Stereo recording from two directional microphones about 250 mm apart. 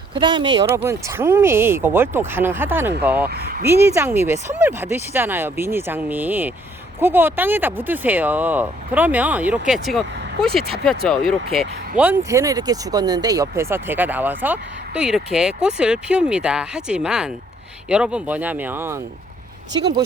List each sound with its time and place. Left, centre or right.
0.1 s speech: centre
3.2 s speech: right
3.8 s speech: centre
19.7 s speech: centre